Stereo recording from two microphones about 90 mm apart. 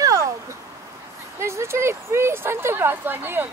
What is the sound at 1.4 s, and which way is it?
Speech, 30° right (ahead or behind).